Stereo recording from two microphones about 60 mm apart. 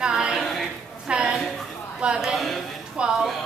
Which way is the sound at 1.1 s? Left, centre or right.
Centre.